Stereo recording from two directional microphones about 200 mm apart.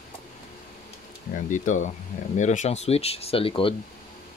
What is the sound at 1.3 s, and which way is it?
Speech, 40° left (ahead or behind).